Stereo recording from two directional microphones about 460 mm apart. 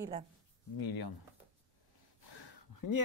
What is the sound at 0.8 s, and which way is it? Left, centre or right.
Speech, left.